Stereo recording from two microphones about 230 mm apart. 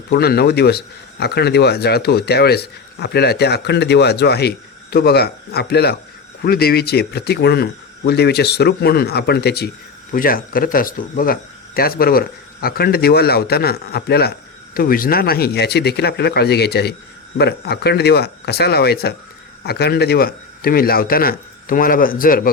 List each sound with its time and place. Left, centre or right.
0.1 s speech: left